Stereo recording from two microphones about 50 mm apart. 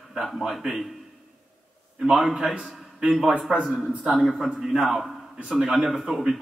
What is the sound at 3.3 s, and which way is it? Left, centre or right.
Speech, right.